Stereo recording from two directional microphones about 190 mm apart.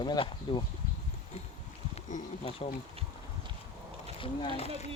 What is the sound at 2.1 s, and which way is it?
Bee, 35° left (ahead or behind).